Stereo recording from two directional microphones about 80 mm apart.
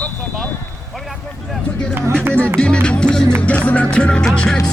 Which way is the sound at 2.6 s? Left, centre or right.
Centre.